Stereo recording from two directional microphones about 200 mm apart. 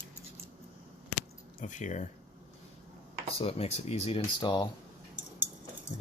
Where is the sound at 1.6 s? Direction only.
40° left (ahead or behind).